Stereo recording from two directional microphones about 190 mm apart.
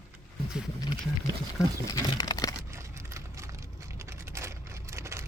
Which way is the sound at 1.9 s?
20° left (ahead or behind).